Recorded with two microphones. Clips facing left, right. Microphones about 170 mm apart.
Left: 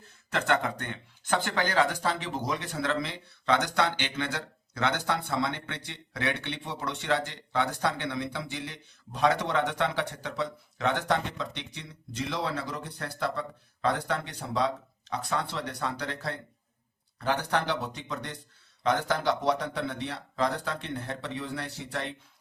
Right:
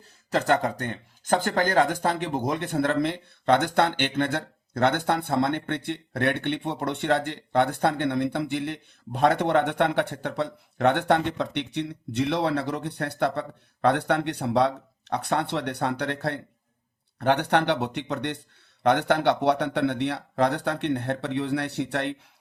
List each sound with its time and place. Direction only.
0.3 s speech: 35° right (ahead or behind); by 22.1 s 65° right (ahead or behind)